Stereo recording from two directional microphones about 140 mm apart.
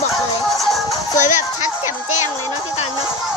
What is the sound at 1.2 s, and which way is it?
Speech, 60° left (ahead or behind).